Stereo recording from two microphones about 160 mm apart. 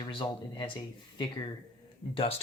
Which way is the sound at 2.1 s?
35° left (ahead or behind).